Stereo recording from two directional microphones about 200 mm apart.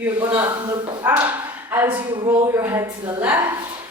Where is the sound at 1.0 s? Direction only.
10° right (ahead or behind).